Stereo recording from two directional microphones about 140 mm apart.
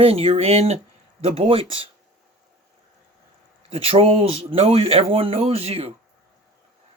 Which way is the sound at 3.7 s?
45° right (ahead or behind).